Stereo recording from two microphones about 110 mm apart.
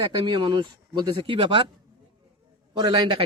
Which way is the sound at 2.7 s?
45° right (ahead or behind).